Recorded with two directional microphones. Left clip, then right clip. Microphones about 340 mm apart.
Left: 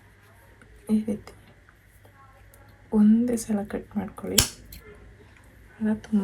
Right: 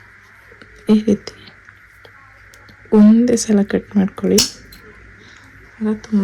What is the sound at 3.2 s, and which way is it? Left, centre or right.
Speech, right.